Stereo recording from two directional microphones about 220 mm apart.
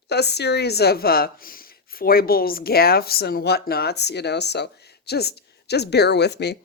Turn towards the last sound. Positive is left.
turn(degrees=50)  # may be behind; listen again after turning